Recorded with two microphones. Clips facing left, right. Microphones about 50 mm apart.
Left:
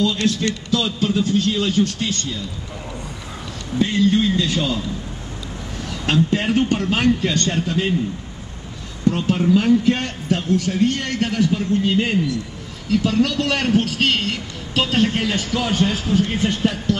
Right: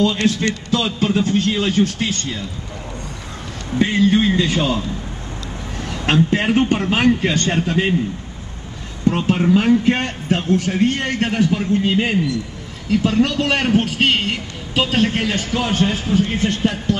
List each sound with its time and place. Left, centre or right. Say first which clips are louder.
0.0 s a man's voice: right 2 dB; right
3.7 s a man's voice: right 2 dB; right
5.9 s a man's voice: right 2 dB; right
9.0 s a man's voice: right 1 dB; right
14.7 s a woman's voice: right 1 dB; centre
15.2 s a man's voice: right 1 dB; right